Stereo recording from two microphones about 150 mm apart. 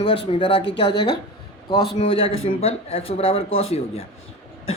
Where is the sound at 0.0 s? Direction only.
35° left (ahead or behind).